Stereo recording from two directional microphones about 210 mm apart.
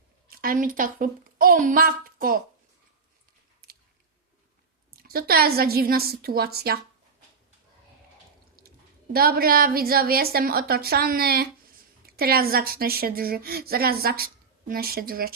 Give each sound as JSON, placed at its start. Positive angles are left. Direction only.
{"t": 0.3, "sound": "a woman's voice", "side_deg": -40}
{"t": 3.6, "sound": "chewing", "side_deg": -45}
{"t": 4.9, "sound": "a woman's voice", "side_deg": -45}
{"t": 8.6, "sound": "a sound", "side_deg": -45}
{"t": 9.1, "sound": "a woman's voice", "side_deg": -45}